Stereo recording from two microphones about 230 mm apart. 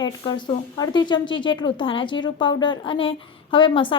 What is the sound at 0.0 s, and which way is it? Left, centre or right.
Speech, centre.